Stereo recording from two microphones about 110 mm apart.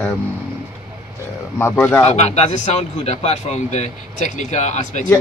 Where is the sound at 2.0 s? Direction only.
90° left.